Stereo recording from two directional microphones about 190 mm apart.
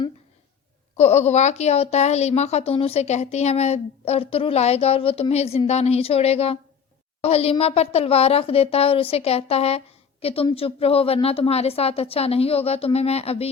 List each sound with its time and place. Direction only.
0.9 s a woman's voice: 35° left (ahead or behind)